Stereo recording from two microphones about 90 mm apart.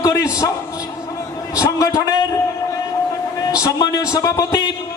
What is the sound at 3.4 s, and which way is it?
A man's voice, 40° left (ahead or behind).